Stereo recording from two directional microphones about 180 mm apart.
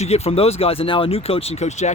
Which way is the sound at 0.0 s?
35° left (ahead or behind).